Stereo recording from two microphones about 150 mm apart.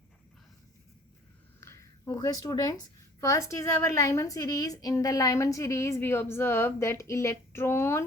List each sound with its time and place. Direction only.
1.6 s a woman's voice: 20° left (ahead or behind)